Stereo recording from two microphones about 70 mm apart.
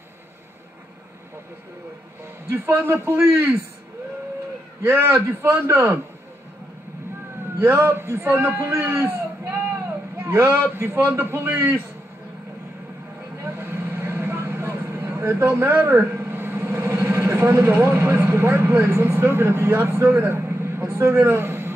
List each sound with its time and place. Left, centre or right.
2.5 s a man's voice: right
4.8 s a man's voice: right
7.5 s a man's voice: right
10.2 s a man's voice: right
13.4 s vehicle: right